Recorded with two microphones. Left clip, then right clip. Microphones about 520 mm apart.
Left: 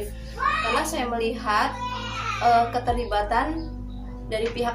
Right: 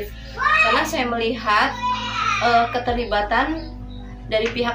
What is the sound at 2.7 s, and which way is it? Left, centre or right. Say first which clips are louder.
A woman's voice: right 3 dB; left.